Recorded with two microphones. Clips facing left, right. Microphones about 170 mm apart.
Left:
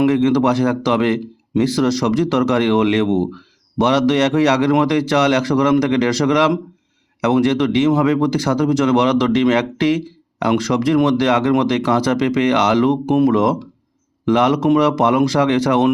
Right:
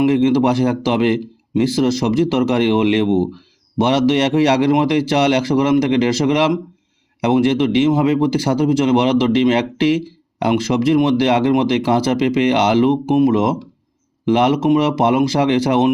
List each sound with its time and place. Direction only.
0.1 s speech: 25° right (ahead or behind)